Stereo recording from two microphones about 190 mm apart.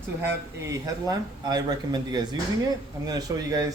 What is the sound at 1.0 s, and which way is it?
Speech, 20° right (ahead or behind).